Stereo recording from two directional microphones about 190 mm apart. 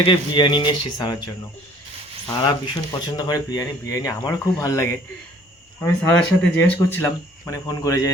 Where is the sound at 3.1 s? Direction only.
20° left (ahead or behind).